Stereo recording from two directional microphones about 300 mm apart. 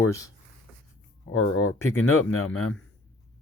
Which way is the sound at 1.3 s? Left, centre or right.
Left.